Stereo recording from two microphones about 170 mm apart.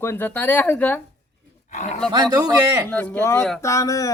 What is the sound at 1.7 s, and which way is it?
Speech, 45° left (ahead or behind).